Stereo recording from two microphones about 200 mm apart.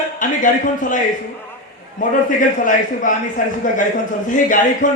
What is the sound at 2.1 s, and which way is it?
A man's voice, 40° left (ahead or behind).